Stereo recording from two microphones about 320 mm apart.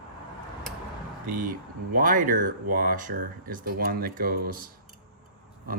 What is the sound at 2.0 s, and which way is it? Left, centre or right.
Speech, right.